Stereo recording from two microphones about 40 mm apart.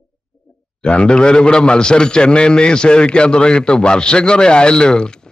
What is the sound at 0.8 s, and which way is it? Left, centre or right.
A man's voice, left.